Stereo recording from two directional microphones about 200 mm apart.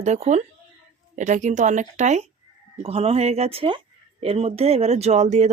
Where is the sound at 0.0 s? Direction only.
35° right (ahead or behind).